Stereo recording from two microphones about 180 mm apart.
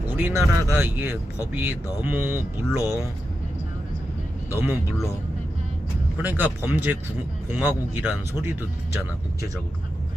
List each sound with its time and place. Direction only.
0.2 s speech: 15° right (ahead or behind)
4.5 s speech: 10° right (ahead or behind)
6.2 s speech: 10° right (ahead or behind)